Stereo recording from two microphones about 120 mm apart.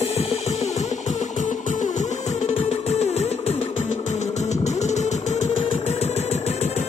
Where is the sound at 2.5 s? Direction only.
60° left (ahead or behind).